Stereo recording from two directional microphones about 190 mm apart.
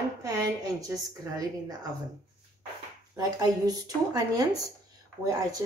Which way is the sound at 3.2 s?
20° right (ahead or behind).